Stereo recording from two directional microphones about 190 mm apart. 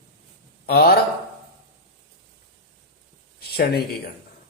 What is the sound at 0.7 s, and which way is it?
Speech, 55° left (ahead or behind).